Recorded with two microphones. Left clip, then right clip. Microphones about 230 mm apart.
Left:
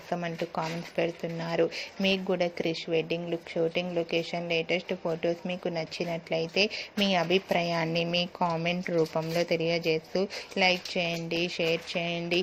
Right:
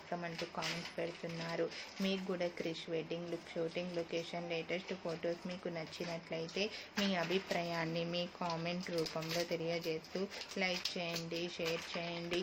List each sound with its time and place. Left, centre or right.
1.0 s a woman's voice: left
6.3 s a woman's voice: left